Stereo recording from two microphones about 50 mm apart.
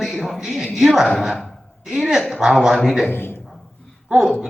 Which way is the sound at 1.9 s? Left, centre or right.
Centre.